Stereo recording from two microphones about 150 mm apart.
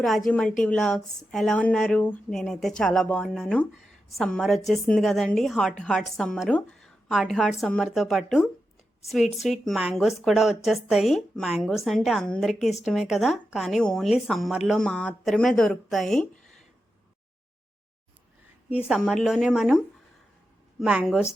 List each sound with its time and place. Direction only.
0.0 s a woman's voice: centre (ahead or behind)
18.9 s a woman's voice: centre (ahead or behind)